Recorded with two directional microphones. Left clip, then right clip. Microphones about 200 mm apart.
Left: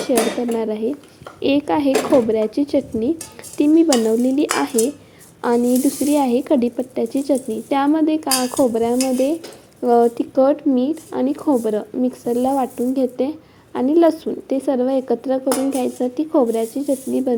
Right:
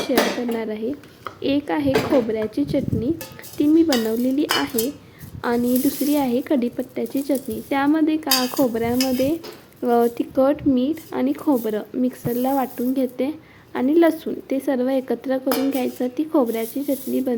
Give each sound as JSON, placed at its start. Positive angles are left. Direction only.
{"t": 0.5, "sound": "speech", "side_deg": 10}
{"t": 8.4, "sound": "dishes", "side_deg": -10}
{"t": 8.7, "sound": "speech", "side_deg": 5}